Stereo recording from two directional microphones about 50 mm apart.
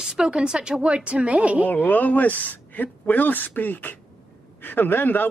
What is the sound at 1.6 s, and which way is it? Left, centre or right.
Speech, left.